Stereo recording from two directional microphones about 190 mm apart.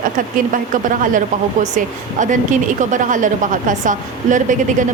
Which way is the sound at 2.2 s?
40° right (ahead or behind).